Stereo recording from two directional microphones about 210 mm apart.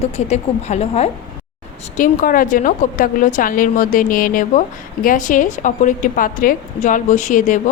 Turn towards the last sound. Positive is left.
turn(degrees=35)  # may be behind; listen again after turning